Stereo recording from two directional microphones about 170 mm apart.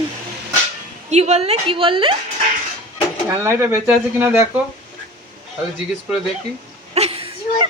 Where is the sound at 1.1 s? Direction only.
40° right (ahead or behind).